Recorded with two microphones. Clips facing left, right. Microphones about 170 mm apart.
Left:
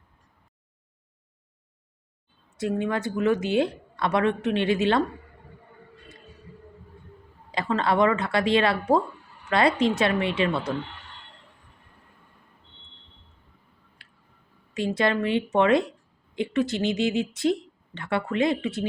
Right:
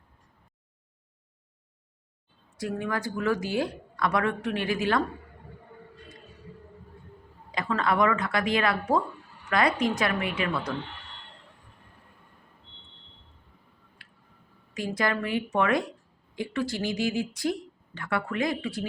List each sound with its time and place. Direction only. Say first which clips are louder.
2.6 s speech: left 4 dB; 20° left (ahead or behind)
7.5 s speech: left 3 dB; 30° left (ahead or behind)
14.7 s speech: left 4 dB; 25° left (ahead or behind)